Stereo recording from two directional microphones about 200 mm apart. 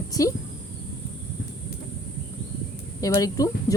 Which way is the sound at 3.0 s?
15° left (ahead or behind).